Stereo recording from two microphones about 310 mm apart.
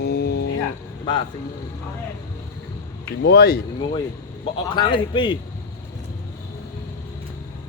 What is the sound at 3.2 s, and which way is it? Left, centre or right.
Speech, left.